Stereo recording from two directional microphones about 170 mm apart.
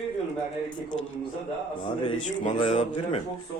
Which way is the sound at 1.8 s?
30° left (ahead or behind).